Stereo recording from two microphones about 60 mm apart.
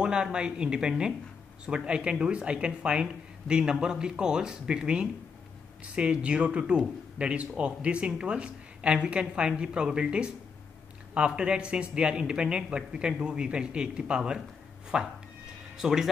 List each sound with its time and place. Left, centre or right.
0.0 s speech: centre